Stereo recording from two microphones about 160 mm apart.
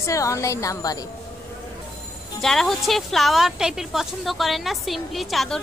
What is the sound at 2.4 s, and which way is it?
Speech, centre (ahead or behind).